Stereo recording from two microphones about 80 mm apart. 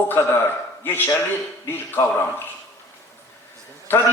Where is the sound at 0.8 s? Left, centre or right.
Left.